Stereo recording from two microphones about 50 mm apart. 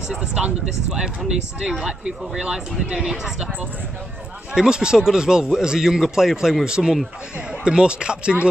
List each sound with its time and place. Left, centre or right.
0.1 s speech: centre
4.6 s speech: centre